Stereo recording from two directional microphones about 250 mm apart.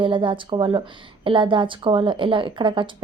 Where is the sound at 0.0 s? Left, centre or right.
Centre.